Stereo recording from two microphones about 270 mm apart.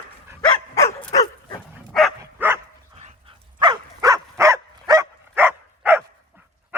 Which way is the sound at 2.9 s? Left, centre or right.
Right.